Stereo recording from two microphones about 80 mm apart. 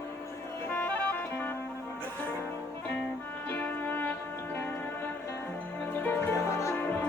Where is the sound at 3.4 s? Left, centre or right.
Left.